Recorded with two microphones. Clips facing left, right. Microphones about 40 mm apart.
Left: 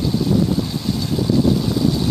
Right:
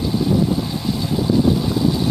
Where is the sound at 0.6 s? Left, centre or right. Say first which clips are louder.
Even; centre.